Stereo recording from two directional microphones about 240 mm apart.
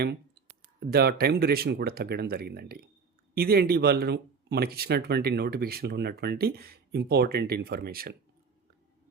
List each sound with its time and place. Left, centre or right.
0.0 s speech: right